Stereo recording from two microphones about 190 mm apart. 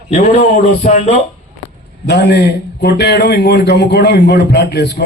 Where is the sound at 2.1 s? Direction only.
60° left (ahead or behind).